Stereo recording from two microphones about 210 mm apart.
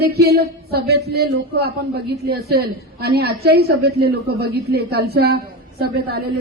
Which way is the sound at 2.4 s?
50° right (ahead or behind).